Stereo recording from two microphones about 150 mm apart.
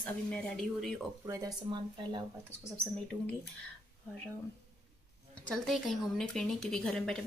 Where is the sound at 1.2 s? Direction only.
25° right (ahead or behind).